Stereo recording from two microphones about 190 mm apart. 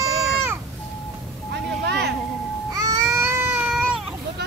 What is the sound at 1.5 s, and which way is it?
Vehicle, 60° right (ahead or behind).